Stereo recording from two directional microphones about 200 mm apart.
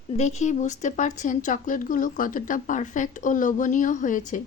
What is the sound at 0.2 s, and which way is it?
A woman's voice, 35° left (ahead or behind).